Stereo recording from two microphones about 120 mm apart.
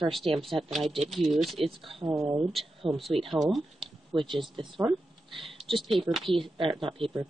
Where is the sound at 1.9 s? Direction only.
35° right (ahead or behind).